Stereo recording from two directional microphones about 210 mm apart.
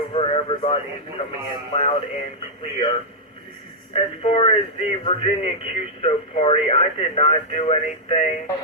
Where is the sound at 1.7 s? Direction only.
30° left (ahead or behind).